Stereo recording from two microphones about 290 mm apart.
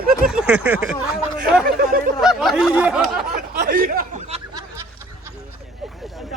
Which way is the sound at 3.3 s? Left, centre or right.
Right.